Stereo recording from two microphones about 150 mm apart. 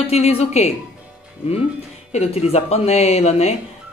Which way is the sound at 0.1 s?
45° left (ahead or behind).